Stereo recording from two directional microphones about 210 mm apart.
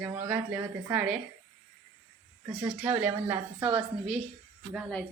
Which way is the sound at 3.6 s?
20° right (ahead or behind).